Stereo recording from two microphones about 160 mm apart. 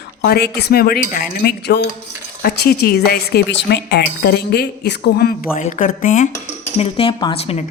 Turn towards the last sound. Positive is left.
turn(degrees=40)  # may be behind; listen again after turning